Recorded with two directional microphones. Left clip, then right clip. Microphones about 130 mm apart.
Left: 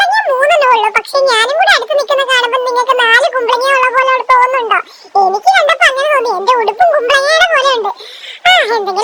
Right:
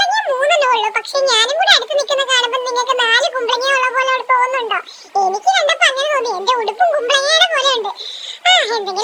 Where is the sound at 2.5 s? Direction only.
30° left (ahead or behind).